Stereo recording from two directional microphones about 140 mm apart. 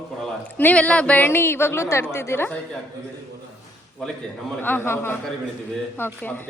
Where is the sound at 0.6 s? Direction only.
10° left (ahead or behind).